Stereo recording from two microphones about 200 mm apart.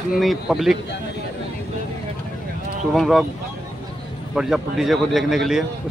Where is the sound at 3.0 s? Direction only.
Centre (ahead or behind).